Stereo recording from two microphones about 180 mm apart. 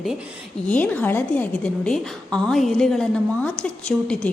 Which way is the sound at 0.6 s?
10° left (ahead or behind).